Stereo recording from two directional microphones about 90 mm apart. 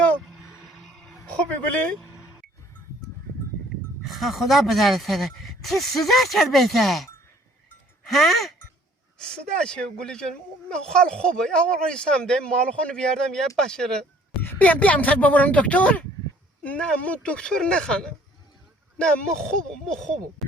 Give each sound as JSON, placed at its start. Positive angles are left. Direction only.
{"t": 0.6, "sound": "a sound", "side_deg": 5}
{"t": 4.0, "sound": "speech", "side_deg": 0}
{"t": 14.4, "sound": "speech", "side_deg": 15}